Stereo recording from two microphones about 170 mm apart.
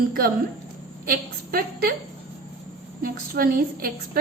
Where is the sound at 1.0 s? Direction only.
60° right (ahead or behind).